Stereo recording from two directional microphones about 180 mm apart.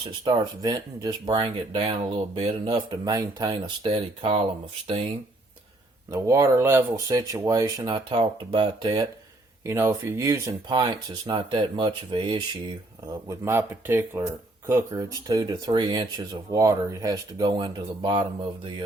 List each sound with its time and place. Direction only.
0.0 s speech: 25° right (ahead or behind)
6.1 s speech: 15° right (ahead or behind)
9.6 s speech: 15° right (ahead or behind)
13.2 s speech: 15° right (ahead or behind)